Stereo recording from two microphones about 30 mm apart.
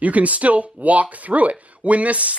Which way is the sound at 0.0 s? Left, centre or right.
Right.